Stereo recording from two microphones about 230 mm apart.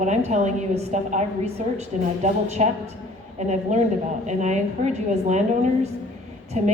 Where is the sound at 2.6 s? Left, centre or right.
Right.